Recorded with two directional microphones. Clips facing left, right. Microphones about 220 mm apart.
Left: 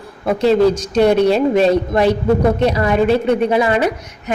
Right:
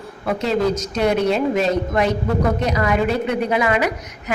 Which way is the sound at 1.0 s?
35° left (ahead or behind).